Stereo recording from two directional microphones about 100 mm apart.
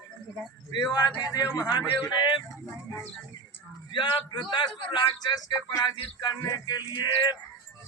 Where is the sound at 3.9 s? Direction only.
50° left (ahead or behind).